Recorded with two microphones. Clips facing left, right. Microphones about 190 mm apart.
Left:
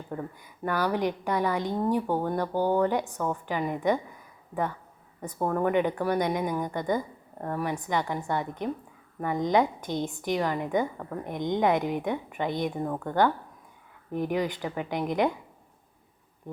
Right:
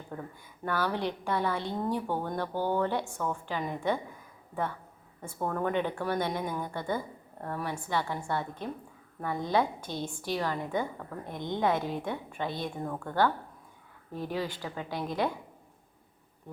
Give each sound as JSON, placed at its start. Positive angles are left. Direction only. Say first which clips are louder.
{"t": 0.1, "sound": "a sound", "louder": "left 5 dB", "side_deg": 10}
{"t": 0.6, "sound": "a woman's voice", "louder": "left 4 dB", "side_deg": 15}
{"t": 2.5, "sound": "speech", "louder": "left 5 dB", "side_deg": 40}
{"t": 2.7, "sound": "a woman's voice", "louder": "left 4 dB", "side_deg": 15}
{"t": 5.4, "sound": "a woman's voice", "louder": "left 5 dB", "side_deg": 15}